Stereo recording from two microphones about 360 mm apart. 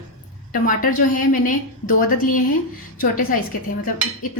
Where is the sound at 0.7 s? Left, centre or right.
Left.